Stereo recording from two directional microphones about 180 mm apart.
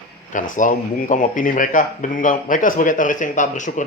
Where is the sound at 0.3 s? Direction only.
45° left (ahead or behind).